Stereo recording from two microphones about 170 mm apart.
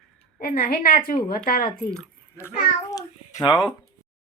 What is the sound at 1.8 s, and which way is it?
Squish, 10° left (ahead or behind).